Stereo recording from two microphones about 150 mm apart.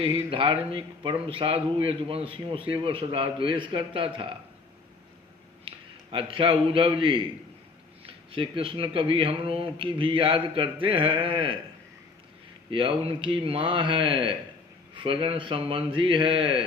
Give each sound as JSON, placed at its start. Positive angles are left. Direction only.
{"t": 0.0, "sound": "a man's voice", "side_deg": -40}
{"t": 5.6, "sound": "a man's voice", "side_deg": -35}
{"t": 12.7, "sound": "a man's voice", "side_deg": -35}